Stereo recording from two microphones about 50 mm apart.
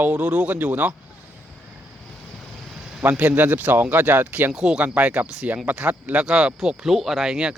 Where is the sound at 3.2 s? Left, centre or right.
Right.